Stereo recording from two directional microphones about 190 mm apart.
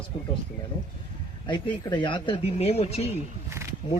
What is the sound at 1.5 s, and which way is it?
Speech, 20° left (ahead or behind).